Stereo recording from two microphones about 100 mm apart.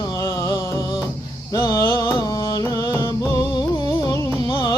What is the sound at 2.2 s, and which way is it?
Music, 40° left (ahead or behind).